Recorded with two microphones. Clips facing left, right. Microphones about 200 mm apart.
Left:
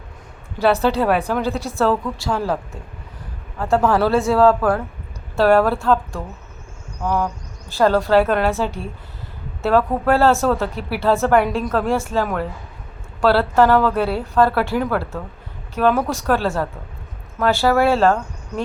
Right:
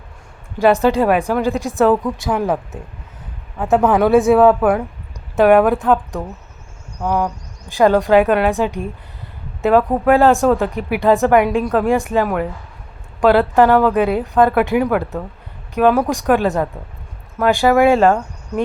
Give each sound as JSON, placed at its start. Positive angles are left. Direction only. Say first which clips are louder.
{"t": 0.6, "sound": "a woman's voice", "louder": "right 4 dB", "side_deg": -15}
{"t": 3.6, "sound": "a woman's voice", "louder": "right 3 dB", "side_deg": -20}
{"t": 13.5, "sound": "a woman's voice", "louder": "right 3 dB", "side_deg": -15}